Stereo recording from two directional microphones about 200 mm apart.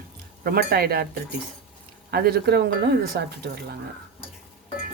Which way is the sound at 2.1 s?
50° right (ahead or behind).